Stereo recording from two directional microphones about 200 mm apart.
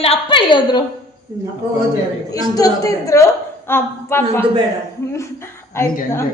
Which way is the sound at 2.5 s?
15° left (ahead or behind).